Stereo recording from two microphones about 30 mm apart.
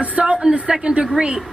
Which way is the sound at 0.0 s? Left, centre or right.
Right.